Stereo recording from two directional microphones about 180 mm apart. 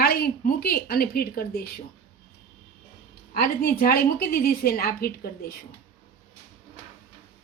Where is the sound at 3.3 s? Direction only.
50° left (ahead or behind).